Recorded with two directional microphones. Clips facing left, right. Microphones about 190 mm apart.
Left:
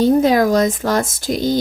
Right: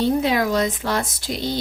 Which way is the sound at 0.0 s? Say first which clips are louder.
Left 6 dB; 45° left (ahead or behind).